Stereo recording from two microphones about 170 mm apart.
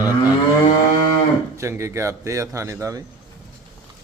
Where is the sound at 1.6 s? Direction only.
15° right (ahead or behind).